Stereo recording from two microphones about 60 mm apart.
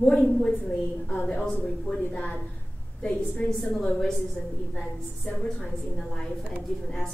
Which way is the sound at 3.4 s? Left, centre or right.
Centre.